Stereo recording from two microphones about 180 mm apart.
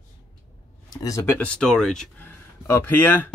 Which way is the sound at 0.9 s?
15° left (ahead or behind).